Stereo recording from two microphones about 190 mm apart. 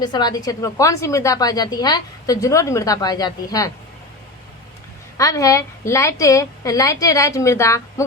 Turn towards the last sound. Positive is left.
turn(degrees=15)  # may be behind; listen again after turning